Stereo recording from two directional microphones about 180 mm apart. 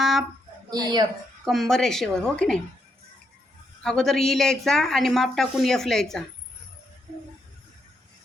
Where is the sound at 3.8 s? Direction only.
Centre (ahead or behind).